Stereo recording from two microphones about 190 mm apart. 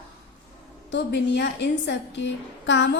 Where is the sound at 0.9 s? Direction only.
60° left (ahead or behind).